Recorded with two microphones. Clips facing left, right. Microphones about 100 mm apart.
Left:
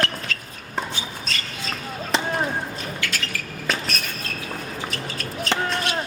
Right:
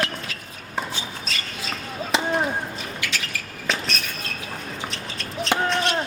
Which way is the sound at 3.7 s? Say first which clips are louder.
Even; centre (ahead or behind).